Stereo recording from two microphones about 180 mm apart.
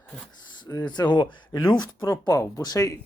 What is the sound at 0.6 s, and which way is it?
Speech, 25° left (ahead or behind).